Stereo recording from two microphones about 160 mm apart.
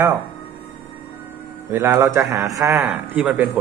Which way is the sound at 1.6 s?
15° right (ahead or behind).